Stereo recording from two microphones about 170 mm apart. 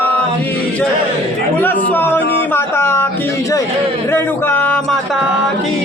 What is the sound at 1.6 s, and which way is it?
Speech, 10° left (ahead or behind).